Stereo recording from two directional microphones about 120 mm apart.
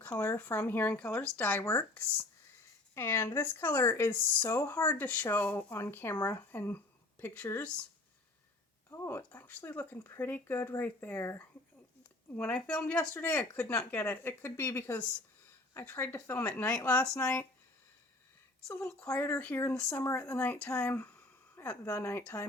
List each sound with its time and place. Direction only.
0.2 s speech: 20° left (ahead or behind)
8.9 s speech: 20° left (ahead or behind)
12.4 s speech: 10° left (ahead or behind)
18.9 s speech: 10° left (ahead or behind)